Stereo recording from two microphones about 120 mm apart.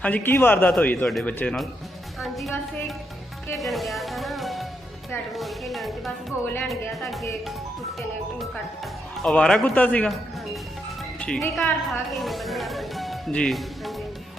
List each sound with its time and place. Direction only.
0.0 s speech: 15° left (ahead or behind)
2.2 s speech: centre (ahead or behind)
3.6 s music: centre (ahead or behind)
5.3 s speech: centre (ahead or behind)
9.2 s speech: 5° left (ahead or behind)
11.2 s a woman's voice: 5° left (ahead or behind)